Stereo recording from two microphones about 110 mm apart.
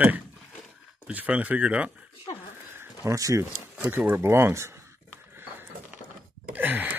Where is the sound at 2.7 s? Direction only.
25° right (ahead or behind).